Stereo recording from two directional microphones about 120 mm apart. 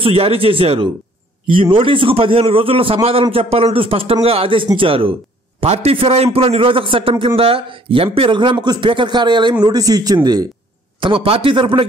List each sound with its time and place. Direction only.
0.0 s a man's voice: 50° right (ahead or behind); by 10.5 s 35° right (ahead or behind)
11.0 s a man's voice: 50° right (ahead or behind)